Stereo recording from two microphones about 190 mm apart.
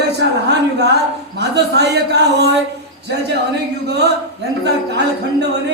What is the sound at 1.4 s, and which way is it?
Speech, 60° right (ahead or behind).